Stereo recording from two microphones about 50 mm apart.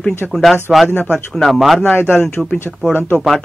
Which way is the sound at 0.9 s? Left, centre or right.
Left.